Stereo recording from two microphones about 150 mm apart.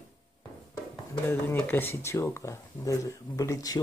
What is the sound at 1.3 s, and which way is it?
Speech, 15° left (ahead or behind).